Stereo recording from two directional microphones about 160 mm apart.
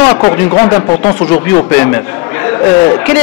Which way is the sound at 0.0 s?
20° left (ahead or behind).